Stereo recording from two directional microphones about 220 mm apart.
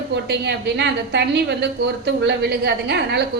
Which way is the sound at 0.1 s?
50° right (ahead or behind).